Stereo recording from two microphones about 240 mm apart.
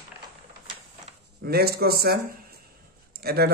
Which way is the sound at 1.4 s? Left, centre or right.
Right.